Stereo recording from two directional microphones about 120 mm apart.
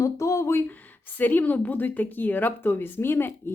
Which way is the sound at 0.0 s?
25° left (ahead or behind).